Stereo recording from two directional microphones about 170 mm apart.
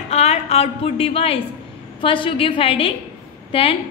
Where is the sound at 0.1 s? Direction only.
40° left (ahead or behind).